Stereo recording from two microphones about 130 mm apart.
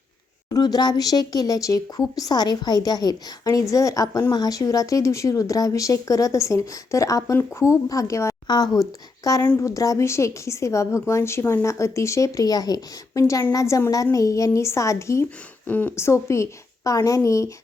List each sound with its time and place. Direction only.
0.5 s speech: 30° left (ahead or behind)